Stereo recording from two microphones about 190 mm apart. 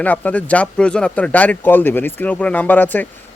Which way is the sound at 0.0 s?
10° left (ahead or behind).